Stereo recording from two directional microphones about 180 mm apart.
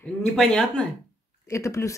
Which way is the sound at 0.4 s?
Centre (ahead or behind).